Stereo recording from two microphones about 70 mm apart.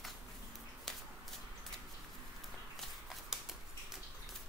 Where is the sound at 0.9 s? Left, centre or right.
Centre.